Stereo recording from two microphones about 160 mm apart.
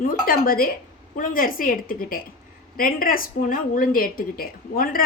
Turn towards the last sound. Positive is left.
turn(degrees=65)  # may be behind; listen again after turning